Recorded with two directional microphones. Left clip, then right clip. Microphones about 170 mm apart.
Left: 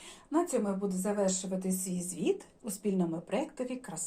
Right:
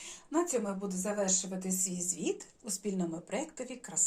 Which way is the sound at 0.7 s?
10° right (ahead or behind).